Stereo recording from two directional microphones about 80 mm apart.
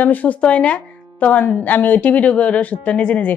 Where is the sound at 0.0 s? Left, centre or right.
Left.